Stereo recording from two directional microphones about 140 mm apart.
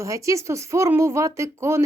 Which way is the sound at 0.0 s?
20° right (ahead or behind).